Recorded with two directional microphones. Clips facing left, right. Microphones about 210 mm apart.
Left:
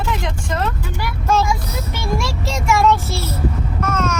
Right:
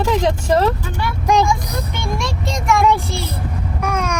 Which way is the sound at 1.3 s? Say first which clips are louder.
Right 2 dB; 15° right (ahead or behind).